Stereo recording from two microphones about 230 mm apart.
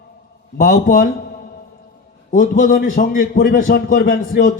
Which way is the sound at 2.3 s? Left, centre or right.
Left.